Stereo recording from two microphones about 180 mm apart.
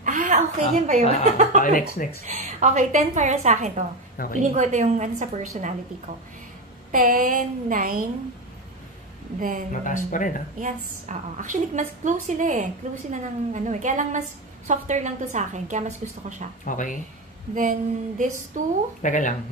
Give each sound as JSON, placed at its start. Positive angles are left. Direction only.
{"t": 0.0, "sound": "a sound", "side_deg": -45}
{"t": 1.6, "sound": "speech", "side_deg": 50}
{"t": 2.2, "sound": "a woman's voice", "side_deg": -40}
{"t": 6.9, "sound": "a woman's voice", "side_deg": -50}
{"t": 9.4, "sound": "a woman's voice", "side_deg": -50}
{"t": 9.7, "sound": "speech", "side_deg": 45}
{"t": 10.6, "sound": "a woman's voice", "side_deg": -45}
{"t": 16.6, "sound": "speech", "side_deg": 45}
{"t": 17.6, "sound": "a woman's voice", "side_deg": -45}
{"t": 19.0, "sound": "speech", "side_deg": 45}